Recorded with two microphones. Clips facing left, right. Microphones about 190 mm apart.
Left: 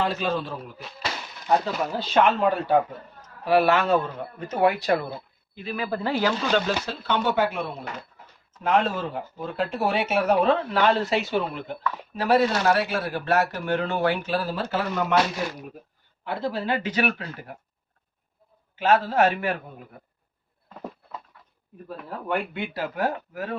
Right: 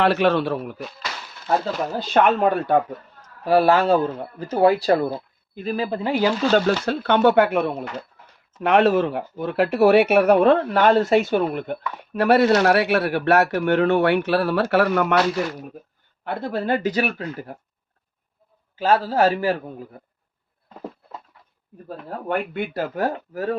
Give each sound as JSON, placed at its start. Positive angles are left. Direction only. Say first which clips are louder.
{"t": 0.0, "sound": "speech", "louder": "right 8 dB", "side_deg": -70}
{"t": 2.0, "sound": "speech", "louder": "right 3 dB", "side_deg": -50}
{"t": 3.4, "sound": "speech", "louder": "right 4 dB", "side_deg": -35}
{"t": 6.7, "sound": "speech", "louder": "right 7 dB", "side_deg": -60}
{"t": 16.2, "sound": "speech", "louder": "right 3 dB", "side_deg": -55}
{"t": 18.8, "sound": "speech", "louder": "right 2 dB", "side_deg": -35}
{"t": 21.8, "sound": "speech", "louder": "right 2 dB", "side_deg": -50}